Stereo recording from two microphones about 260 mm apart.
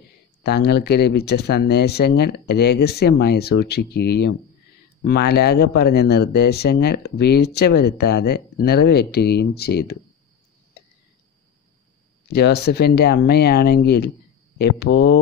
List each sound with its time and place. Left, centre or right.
0.4 s speech: left
12.3 s speech: left